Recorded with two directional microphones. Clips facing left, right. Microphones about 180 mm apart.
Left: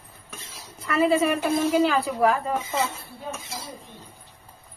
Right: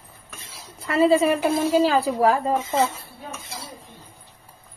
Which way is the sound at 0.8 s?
30° right (ahead or behind).